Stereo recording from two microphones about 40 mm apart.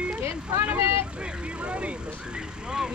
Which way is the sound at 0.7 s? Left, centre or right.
Right.